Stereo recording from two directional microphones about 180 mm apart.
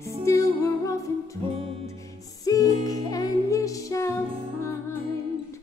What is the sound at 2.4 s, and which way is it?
Music, 20° left (ahead or behind).